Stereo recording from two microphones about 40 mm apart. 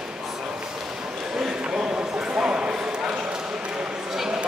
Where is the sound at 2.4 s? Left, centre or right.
Right.